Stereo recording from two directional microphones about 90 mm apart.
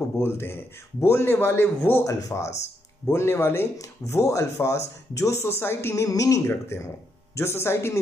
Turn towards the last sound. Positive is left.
turn(degrees=30)  # may be behind; listen again after turning